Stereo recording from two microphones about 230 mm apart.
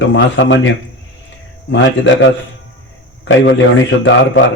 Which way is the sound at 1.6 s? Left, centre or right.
Left.